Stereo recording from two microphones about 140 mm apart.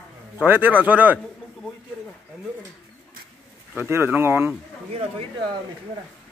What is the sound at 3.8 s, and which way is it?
Speech, 15° right (ahead or behind).